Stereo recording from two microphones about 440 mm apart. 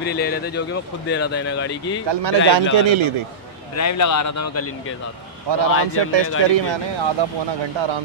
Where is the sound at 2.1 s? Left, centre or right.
Right.